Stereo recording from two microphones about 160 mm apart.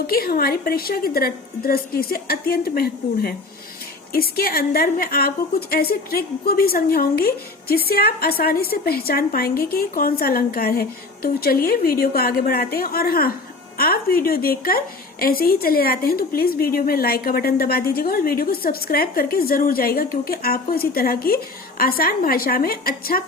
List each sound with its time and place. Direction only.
0.1 s a woman's voice: 70° left (ahead or behind)